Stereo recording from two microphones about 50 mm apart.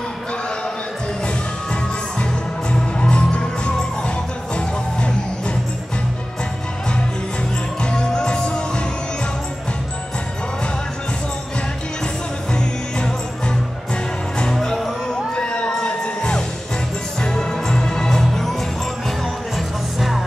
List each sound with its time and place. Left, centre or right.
1.2 s music: left
7.8 s music: centre
12.5 s music: centre
14.4 s music: centre
15.3 s music: left; by 20.2 s centre